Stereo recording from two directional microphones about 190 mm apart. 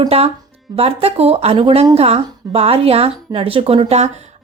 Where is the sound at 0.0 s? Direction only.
30° right (ahead or behind).